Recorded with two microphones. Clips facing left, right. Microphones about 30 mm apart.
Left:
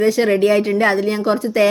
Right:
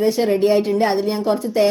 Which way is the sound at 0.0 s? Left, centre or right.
Left.